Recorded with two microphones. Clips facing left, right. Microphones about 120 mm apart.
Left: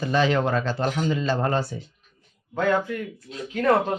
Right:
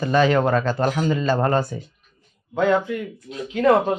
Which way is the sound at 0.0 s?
50° right (ahead or behind).